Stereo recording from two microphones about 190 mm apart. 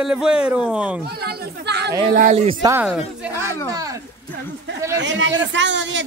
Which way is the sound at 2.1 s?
45° right (ahead or behind).